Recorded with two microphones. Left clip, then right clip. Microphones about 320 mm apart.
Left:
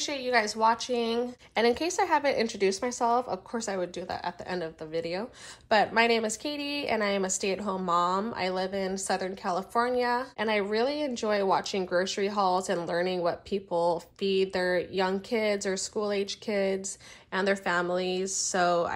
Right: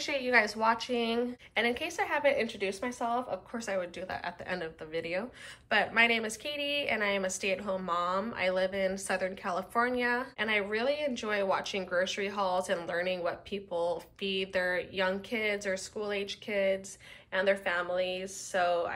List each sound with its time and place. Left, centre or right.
0.0 s a woman's voice: centre